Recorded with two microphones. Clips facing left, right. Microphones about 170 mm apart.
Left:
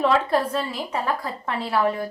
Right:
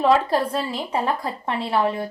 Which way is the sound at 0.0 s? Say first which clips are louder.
Right 2 dB; 35° right (ahead or behind).